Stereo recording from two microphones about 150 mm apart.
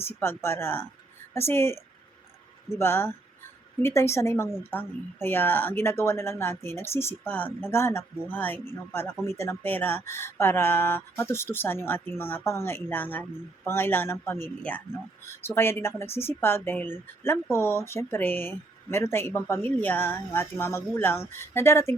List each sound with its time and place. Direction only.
0.0 s speech: 15° left (ahead or behind)